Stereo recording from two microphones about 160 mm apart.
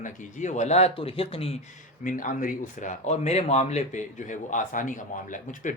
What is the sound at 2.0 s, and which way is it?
Speech, 55° left (ahead or behind).